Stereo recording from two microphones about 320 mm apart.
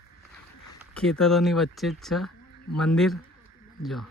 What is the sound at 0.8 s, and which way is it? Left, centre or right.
Speech, centre.